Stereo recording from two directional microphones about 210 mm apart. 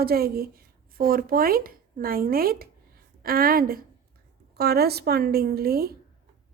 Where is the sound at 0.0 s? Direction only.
45° right (ahead or behind).